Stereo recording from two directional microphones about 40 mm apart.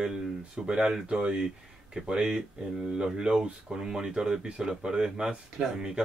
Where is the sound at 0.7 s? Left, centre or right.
Centre.